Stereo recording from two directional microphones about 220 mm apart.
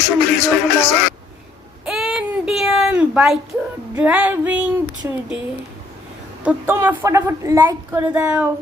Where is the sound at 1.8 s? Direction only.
Centre (ahead or behind).